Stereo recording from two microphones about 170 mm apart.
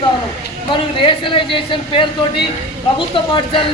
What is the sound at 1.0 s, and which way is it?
Speech, 30° left (ahead or behind).